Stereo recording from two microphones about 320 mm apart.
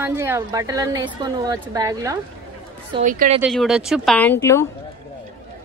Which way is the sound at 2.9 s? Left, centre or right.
Right.